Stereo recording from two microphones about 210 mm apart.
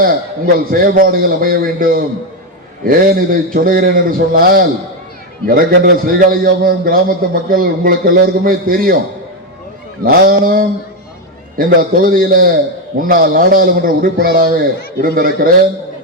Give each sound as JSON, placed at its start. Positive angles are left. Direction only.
{"t": 0.0, "sound": "a man's voice", "side_deg": -45}
{"t": 10.0, "sound": "a man's voice", "side_deg": -45}